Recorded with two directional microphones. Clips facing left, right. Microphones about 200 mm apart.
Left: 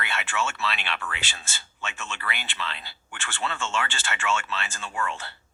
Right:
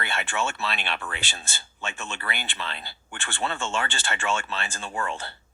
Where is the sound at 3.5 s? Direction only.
35° right (ahead or behind).